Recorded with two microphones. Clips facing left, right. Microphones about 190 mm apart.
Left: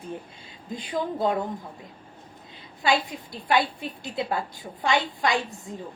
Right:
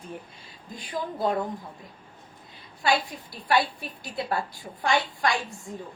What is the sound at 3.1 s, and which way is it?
A woman's voice, 20° left (ahead or behind).